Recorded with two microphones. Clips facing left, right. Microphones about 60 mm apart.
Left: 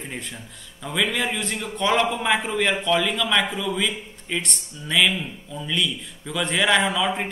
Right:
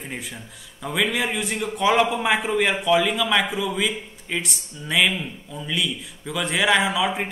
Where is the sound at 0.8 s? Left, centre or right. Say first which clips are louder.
Right 1 dB; centre.